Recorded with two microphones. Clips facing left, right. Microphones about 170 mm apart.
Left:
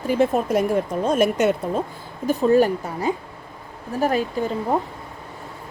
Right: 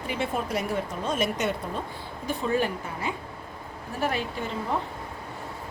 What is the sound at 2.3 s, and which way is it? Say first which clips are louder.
A woman's voice: left 10 dB; 40° left (ahead or behind).